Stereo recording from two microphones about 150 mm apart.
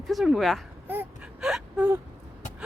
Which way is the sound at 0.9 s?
10° right (ahead or behind).